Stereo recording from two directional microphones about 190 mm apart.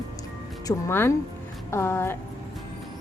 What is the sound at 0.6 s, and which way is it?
Speech, 10° left (ahead or behind).